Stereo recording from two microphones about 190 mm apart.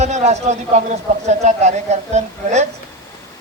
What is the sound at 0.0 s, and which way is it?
A man's voice, 35° right (ahead or behind).